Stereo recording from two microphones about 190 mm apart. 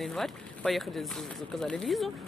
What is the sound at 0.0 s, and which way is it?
Speech, centre (ahead or behind).